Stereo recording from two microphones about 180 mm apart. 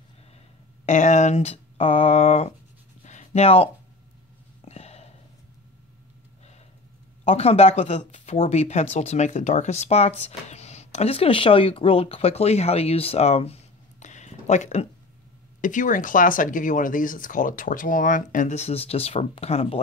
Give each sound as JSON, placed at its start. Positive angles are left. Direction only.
{"t": 0.8, "sound": "speech", "side_deg": 40}
{"t": 3.0, "sound": "a sound", "side_deg": 40}
{"t": 4.6, "sound": "burping", "side_deg": 35}
{"t": 7.2, "sound": "speech", "side_deg": 35}